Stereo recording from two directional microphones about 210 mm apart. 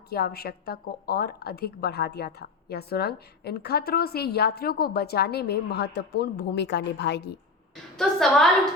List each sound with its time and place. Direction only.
0.1 s a woman's voice: 50° left (ahead or behind)
7.9 s a woman's voice: centre (ahead or behind)